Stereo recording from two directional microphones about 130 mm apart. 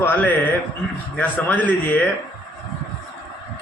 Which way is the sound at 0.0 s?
15° left (ahead or behind).